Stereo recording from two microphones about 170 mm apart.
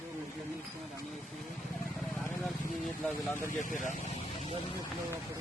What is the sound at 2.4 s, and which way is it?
Speech, centre (ahead or behind).